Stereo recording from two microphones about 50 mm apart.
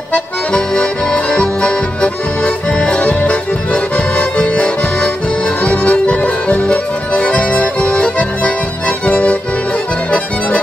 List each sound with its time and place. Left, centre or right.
0.1 s accordion: centre
5.6 s music: left